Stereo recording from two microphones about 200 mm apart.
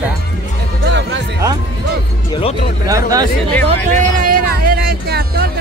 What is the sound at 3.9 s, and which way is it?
Music, 45° right (ahead or behind).